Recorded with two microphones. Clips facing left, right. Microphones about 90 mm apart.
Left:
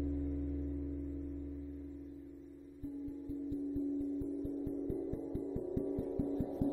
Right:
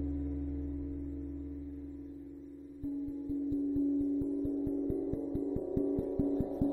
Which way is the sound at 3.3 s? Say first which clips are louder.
Right 7 dB; 20° right (ahead or behind).